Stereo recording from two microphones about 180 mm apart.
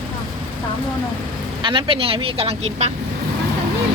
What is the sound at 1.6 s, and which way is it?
A woman's voice, 30° right (ahead or behind).